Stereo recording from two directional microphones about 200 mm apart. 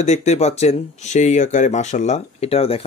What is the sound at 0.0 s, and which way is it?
Speech, 35° left (ahead or behind).